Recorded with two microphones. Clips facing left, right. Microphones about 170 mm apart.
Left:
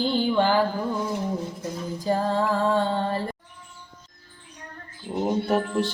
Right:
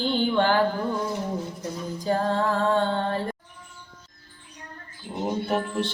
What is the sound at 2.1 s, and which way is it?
Music, 5° left (ahead or behind).